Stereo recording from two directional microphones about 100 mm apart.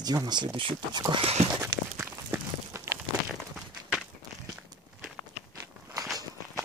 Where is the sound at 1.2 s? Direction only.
90° right.